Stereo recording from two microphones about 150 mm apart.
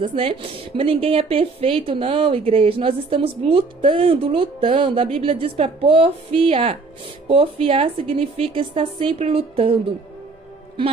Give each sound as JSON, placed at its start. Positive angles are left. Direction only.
{"t": 0.0, "sound": "speech", "side_deg": -40}